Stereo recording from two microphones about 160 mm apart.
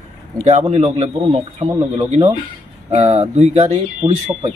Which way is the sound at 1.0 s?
30° right (ahead or behind).